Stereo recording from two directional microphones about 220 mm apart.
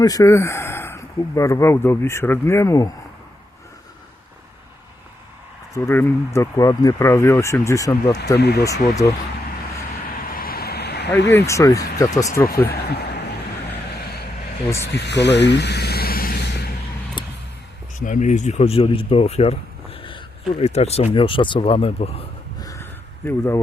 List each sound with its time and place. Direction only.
0.0 s speech: 15° left (ahead or behind)
5.7 s speech: 10° left (ahead or behind)
8.4 s speech: 50° left (ahead or behind)
10.2 s vehicle: 40° left (ahead or behind)
11.3 s speech: 15° left (ahead or behind)
12.5 s speech: 45° left (ahead or behind)
14.9 s vehicle: 50° left (ahead or behind)
17.2 s vehicle: 20° left (ahead or behind)
18.0 s speech: 35° left (ahead or behind)
22.6 s a sound: 10° left (ahead or behind)